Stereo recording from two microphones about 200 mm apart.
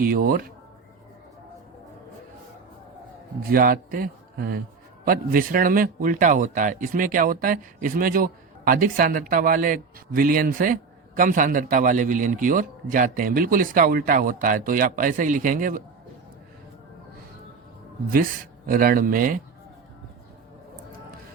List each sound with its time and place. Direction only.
0.0 s a man's voice: 45° right (ahead or behind)
3.4 s a man's voice: 45° right (ahead or behind)
18.1 s a man's voice: 45° right (ahead or behind)